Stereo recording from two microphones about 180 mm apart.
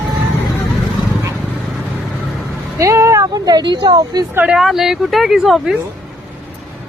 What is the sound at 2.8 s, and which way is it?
Speech, 15° right (ahead or behind).